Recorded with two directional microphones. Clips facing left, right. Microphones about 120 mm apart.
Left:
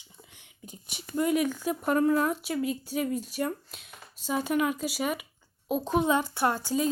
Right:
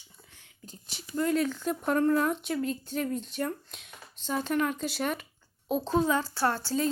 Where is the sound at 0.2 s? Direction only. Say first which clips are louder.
Left 3 dB; 15° left (ahead or behind).